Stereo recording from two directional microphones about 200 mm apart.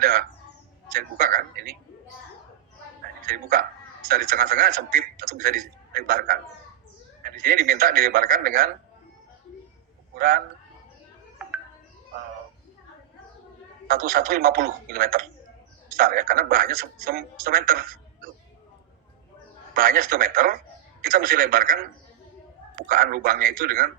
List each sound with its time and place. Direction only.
0.0 s a sound: 50° right (ahead or behind)
3.2 s a man's voice: 45° right (ahead or behind)
10.2 s a man's voice: 45° right (ahead or behind)
13.8 s a man's voice: 45° right (ahead or behind)
19.7 s a man's voice: 45° right (ahead or behind)
22.9 s a man's voice: 45° right (ahead or behind)